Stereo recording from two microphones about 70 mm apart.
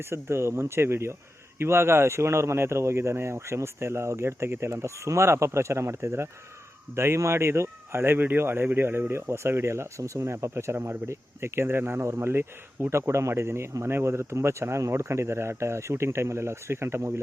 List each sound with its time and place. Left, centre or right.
0.1 s speech: right